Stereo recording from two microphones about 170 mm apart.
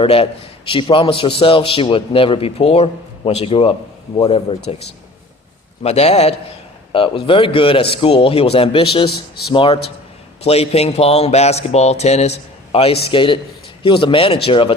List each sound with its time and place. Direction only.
0.0 s a man's voice: 35° left (ahead or behind)
5.8 s a man's voice: 40° left (ahead or behind)